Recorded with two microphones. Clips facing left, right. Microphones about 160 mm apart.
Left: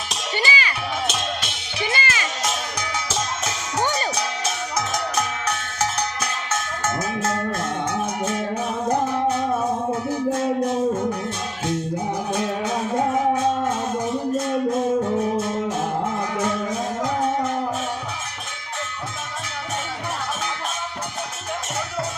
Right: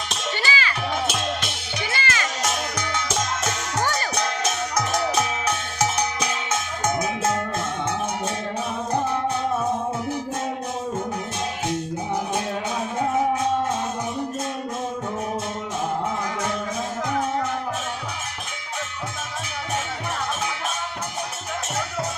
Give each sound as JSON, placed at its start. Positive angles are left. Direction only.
{"t": 0.3, "sound": "music", "side_deg": 15}
{"t": 1.9, "sound": "music", "side_deg": 15}
{"t": 3.4, "sound": "music", "side_deg": 15}
{"t": 4.9, "sound": "music", "side_deg": 0}